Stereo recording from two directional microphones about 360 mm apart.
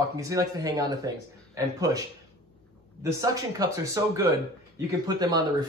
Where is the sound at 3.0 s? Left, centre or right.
Centre.